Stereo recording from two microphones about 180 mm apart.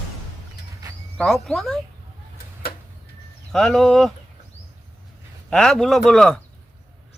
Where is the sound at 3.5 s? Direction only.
Centre (ahead or behind).